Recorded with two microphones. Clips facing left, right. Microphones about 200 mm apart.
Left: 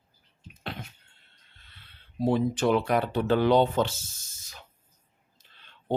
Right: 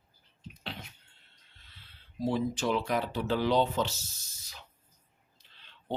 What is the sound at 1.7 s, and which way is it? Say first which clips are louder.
Speech: left 5 dB; 60° left (ahead or behind).